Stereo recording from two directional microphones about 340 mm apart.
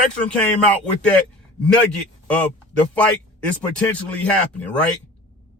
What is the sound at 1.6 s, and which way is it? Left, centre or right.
Speech, centre.